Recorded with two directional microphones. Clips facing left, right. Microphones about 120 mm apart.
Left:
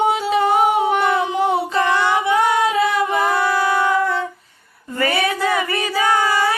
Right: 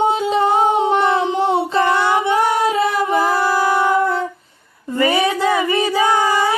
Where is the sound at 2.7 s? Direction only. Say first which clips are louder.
Right 1 dB; 35° right (ahead or behind).